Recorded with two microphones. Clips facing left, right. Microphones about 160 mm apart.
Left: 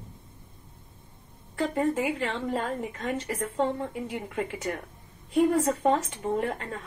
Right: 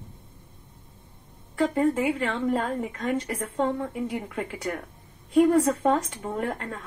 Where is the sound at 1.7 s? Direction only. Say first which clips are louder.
Right 2 dB; centre (ahead or behind).